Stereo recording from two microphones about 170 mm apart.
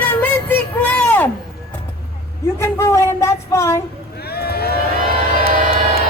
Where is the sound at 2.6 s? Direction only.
15° left (ahead or behind).